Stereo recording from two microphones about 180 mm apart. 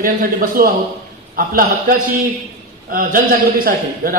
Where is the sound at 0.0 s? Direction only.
50° right (ahead or behind).